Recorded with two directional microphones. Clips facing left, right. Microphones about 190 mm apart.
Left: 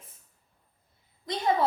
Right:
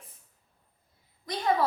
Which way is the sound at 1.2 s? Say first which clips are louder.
Left 1 dB; 25° left (ahead or behind).